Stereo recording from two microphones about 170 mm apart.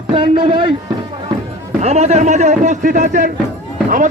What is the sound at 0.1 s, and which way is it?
Speech, 30° right (ahead or behind).